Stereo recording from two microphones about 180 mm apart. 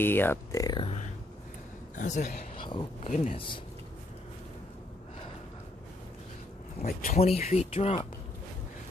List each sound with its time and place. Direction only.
0.0 s speech: 10° left (ahead or behind)
2.0 s a man's voice: 45° left (ahead or behind)
2.5 s speech: 25° left (ahead or behind)
6.8 s speech: 40° left (ahead or behind)